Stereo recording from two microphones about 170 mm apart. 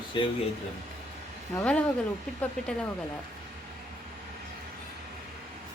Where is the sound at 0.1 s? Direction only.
30° left (ahead or behind).